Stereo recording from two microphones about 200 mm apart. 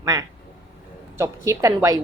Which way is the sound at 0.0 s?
15° right (ahead or behind).